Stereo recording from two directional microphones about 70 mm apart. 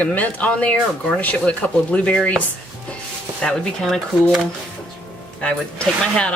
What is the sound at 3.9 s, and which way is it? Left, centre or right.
Speech, centre.